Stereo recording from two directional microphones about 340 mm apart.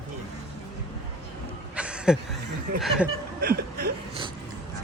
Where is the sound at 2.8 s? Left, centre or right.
Centre.